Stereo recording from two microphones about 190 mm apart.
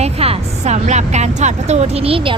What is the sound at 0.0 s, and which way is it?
A woman's voice, 35° right (ahead or behind).